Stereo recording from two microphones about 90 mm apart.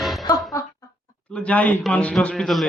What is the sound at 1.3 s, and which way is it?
A woman's voice, 15° left (ahead or behind).